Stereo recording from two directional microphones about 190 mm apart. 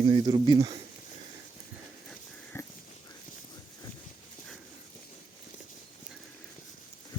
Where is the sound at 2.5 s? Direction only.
15° left (ahead or behind).